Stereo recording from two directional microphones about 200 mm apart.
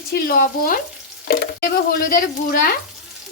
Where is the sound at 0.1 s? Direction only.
45° left (ahead or behind).